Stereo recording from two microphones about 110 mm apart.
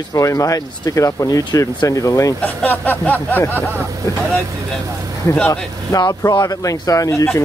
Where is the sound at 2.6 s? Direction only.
15° left (ahead or behind).